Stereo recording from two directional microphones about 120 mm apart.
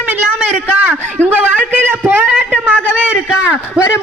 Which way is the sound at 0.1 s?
10° right (ahead or behind).